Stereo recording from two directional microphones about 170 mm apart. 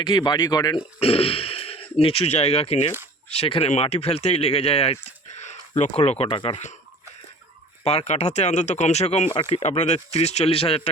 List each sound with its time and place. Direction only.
0.0 s speech: 25° left (ahead or behind)
0.9 s speech: 35° left (ahead or behind)
7.9 s speech: 40° left (ahead or behind)